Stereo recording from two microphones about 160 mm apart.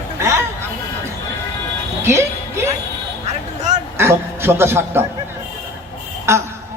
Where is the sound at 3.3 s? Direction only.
45° right (ahead or behind).